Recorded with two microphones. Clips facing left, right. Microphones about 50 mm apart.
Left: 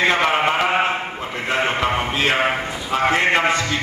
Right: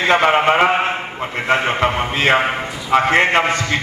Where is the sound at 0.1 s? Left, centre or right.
Right.